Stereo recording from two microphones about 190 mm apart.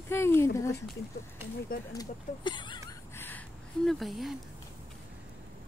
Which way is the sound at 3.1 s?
10° left (ahead or behind).